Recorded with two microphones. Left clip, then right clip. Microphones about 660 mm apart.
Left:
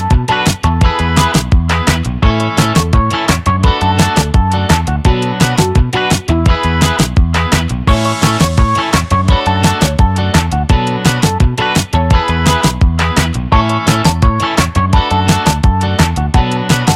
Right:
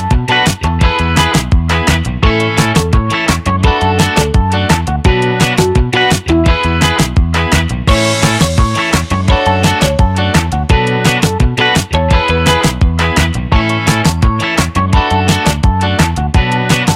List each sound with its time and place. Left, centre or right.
0.9 s music: right
12.2 s music: left